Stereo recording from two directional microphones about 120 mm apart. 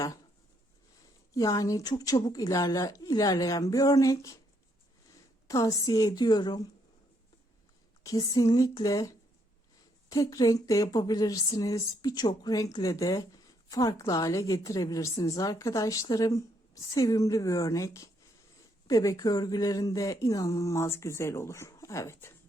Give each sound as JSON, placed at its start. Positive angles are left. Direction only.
{"t": 1.3, "sound": "speech", "side_deg": 30}
{"t": 5.5, "sound": "speech", "side_deg": 30}
{"t": 8.0, "sound": "speech", "side_deg": 30}